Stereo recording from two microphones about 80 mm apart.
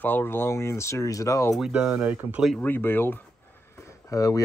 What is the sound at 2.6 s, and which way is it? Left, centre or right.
Speech, left.